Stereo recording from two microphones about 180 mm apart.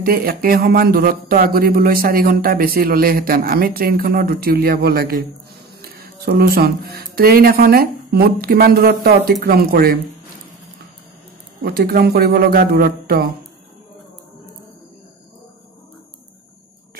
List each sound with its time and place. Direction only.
0.0 s speech: 55° right (ahead or behind)
11.6 s speech: 55° right (ahead or behind)